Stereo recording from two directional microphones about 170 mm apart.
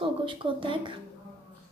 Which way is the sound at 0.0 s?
30° right (ahead or behind).